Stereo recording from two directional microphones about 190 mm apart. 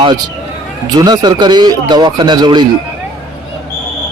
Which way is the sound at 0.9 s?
20° right (ahead or behind).